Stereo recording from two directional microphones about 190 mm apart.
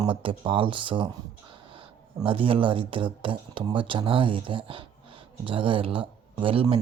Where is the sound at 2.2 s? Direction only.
25° right (ahead or behind).